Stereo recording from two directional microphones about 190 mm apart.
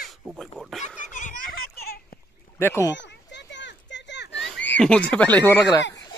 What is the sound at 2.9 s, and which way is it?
Children playing, 65° left (ahead or behind).